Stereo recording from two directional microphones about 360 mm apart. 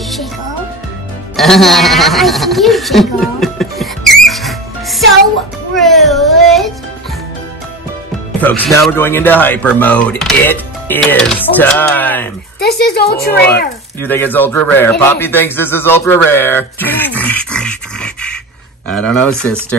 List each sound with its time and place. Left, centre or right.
1.3 s a sound: centre
5.8 s child singing: centre
8.4 s speech: centre
12.5 s speech: left
14.0 s a man's voice: centre